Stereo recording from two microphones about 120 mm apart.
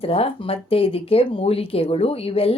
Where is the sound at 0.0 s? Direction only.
55° left (ahead or behind).